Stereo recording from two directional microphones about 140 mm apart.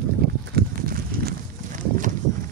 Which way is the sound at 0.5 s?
90° right.